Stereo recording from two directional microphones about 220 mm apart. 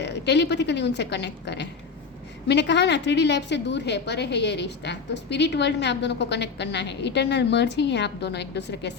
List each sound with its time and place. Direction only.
0.0 s a woman's voice: 50° left (ahead or behind)